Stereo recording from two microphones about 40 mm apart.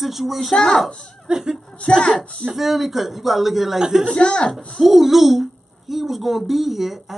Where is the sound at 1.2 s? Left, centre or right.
Centre.